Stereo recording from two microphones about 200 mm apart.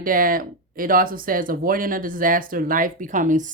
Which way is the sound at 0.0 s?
45° right (ahead or behind).